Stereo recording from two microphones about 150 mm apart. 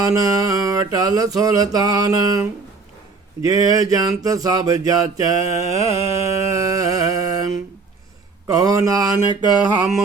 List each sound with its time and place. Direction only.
0.0 s mantra: 20° right (ahead or behind)
5.5 s a sound: 40° left (ahead or behind)
6.1 s mantra: 20° right (ahead or behind)